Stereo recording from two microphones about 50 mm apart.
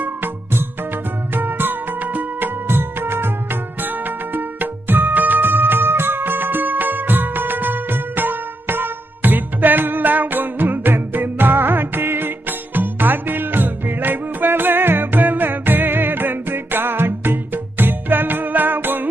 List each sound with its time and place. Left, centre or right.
0.0 s music: right
2.6 s music: right